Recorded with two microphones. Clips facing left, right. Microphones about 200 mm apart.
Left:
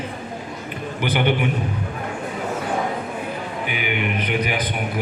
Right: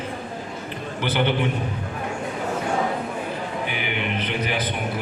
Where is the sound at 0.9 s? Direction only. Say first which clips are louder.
Left 1 dB; 15° left (ahead or behind).